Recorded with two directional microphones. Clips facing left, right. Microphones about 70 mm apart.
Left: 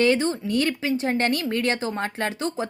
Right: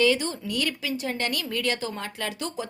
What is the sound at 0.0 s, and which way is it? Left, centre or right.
Speech, left.